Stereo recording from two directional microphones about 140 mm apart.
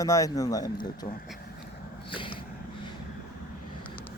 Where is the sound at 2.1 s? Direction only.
35° left (ahead or behind).